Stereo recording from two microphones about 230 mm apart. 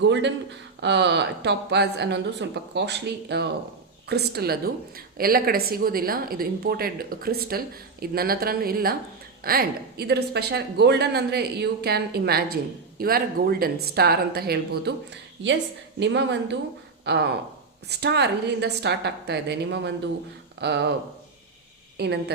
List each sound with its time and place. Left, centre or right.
0.0 s a woman's voice: right
21.9 s speech: right